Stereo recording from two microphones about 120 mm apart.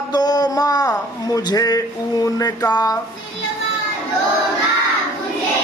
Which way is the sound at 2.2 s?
30° left (ahead or behind).